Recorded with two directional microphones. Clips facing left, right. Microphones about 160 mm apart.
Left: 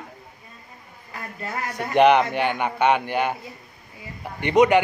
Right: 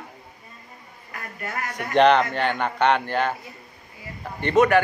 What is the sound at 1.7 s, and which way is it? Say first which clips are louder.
A man's voice: left 1 dB; 10° left (ahead or behind).